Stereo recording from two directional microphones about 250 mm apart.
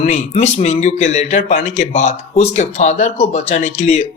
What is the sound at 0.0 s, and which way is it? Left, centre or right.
Speech, left.